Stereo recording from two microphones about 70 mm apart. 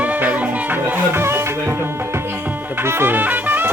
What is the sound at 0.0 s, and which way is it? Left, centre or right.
Music, right.